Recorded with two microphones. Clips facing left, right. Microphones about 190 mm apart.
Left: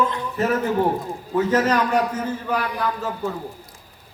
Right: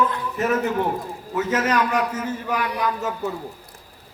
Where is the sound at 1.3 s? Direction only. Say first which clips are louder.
Left 3 dB; 35° left (ahead or behind).